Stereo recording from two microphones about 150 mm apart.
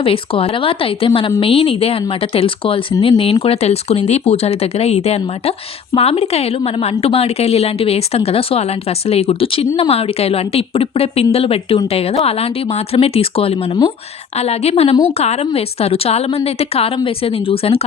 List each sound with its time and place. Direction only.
0.0 s a woman's voice: 40° left (ahead or behind)